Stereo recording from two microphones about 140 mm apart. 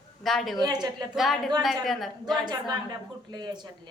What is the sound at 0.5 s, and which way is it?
Speech, 30° right (ahead or behind).